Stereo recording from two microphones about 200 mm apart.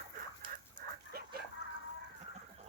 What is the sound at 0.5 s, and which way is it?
Dog, 45° right (ahead or behind).